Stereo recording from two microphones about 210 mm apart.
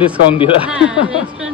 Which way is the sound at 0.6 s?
5° right (ahead or behind).